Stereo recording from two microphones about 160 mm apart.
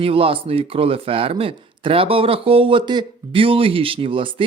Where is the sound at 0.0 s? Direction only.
35° right (ahead or behind).